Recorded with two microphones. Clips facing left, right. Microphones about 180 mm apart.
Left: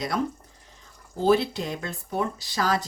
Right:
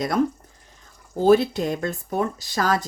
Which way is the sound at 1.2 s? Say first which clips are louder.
Right 5 dB; 50° right (ahead or behind).